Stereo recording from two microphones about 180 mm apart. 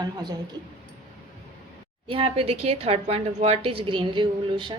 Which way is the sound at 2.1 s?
30° right (ahead or behind).